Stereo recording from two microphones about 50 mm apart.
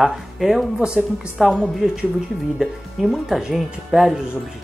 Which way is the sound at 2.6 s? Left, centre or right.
Centre.